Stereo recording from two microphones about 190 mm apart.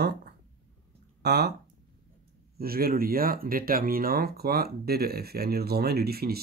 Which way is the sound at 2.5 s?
50° right (ahead or behind).